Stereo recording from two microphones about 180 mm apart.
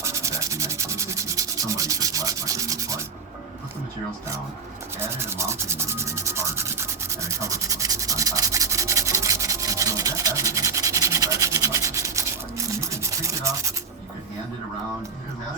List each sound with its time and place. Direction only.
0.0 s sanding: 15° right (ahead or behind)
4.9 s sanding: 15° right (ahead or behind)